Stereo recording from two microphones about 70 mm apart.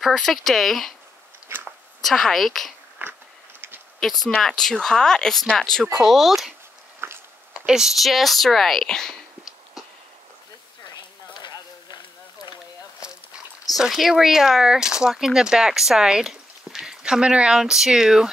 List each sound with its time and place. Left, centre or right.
0.0 s speech: centre
2.0 s speech: centre
3.0 s biting: right
4.0 s speech: centre
7.0 s a sound: right
7.5 s speech: centre
11.3 s run: left
13.7 s speech: centre